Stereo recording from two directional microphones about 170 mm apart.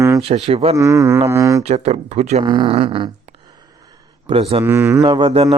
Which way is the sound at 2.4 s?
30° right (ahead or behind).